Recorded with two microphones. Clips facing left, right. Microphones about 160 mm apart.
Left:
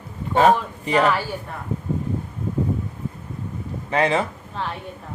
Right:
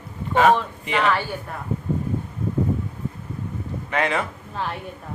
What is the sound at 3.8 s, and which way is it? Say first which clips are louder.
Speech: left 3 dB; 30° left (ahead or behind).